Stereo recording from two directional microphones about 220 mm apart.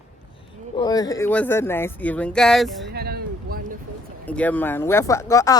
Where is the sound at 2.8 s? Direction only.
45° right (ahead or behind).